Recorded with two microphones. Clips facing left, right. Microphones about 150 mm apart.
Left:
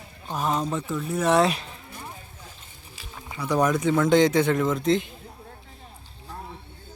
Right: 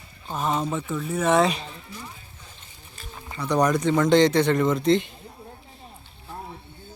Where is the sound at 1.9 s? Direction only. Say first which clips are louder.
Even; 55° left (ahead or behind).